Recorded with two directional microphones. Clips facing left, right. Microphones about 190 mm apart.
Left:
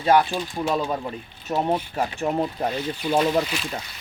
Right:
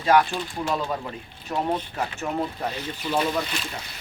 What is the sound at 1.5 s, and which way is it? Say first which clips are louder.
Speech: left 3 dB; 30° left (ahead or behind).